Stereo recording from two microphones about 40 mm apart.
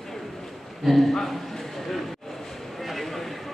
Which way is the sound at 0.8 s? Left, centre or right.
Centre.